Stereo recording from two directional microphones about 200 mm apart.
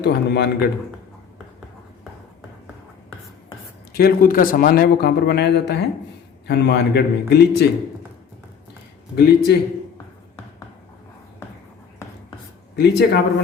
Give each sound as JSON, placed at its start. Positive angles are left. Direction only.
{"t": 0.0, "sound": "a man's voice", "side_deg": 55}
{"t": 3.9, "sound": "a man's voice", "side_deg": 45}
{"t": 9.1, "sound": "a man's voice", "side_deg": 55}
{"t": 12.7, "sound": "a man's voice", "side_deg": 55}